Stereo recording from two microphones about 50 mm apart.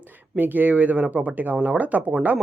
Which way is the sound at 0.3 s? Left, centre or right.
Right.